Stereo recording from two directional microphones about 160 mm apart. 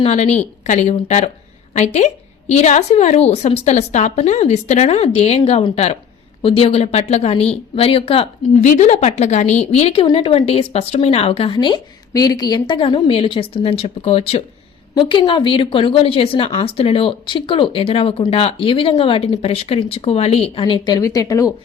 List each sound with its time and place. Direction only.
0.0 s a woman's voice: 45° left (ahead or behind); by 21.5 s 20° left (ahead or behind)